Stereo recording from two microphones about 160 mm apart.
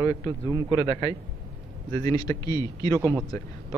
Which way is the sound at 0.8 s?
25° left (ahead or behind).